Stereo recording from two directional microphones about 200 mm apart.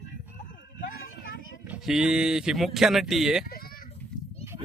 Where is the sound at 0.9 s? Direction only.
45° left (ahead or behind).